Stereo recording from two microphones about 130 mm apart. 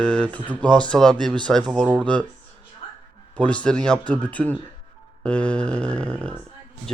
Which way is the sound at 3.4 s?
10° left (ahead or behind).